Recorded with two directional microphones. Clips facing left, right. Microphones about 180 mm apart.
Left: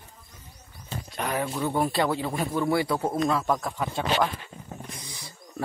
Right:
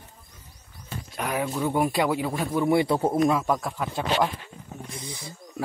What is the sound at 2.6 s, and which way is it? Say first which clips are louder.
Speech: right 5 dB; 25° right (ahead or behind).